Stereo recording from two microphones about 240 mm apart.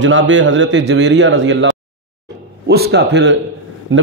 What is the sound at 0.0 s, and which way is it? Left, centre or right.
A man's voice, right.